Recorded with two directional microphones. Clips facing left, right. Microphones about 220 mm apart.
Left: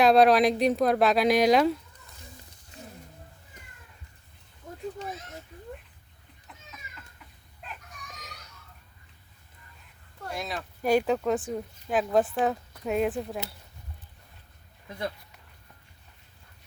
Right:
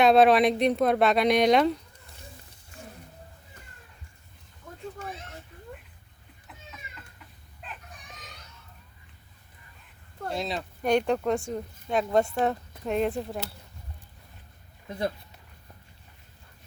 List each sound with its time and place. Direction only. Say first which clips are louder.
0.0 s speech: even; centre (ahead or behind)
10.2 s speech: right 4 dB; 25° right (ahead or behind)
10.8 s speech: even; 5° left (ahead or behind)